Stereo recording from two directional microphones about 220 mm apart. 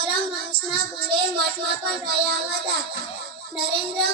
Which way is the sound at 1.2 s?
45° right (ahead or behind).